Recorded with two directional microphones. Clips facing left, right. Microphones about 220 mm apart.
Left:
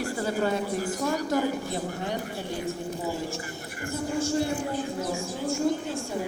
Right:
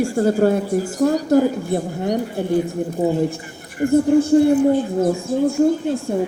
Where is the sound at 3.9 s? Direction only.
55° right (ahead or behind).